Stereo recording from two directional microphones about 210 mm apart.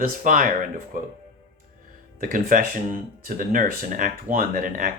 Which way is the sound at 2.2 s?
40° right (ahead or behind).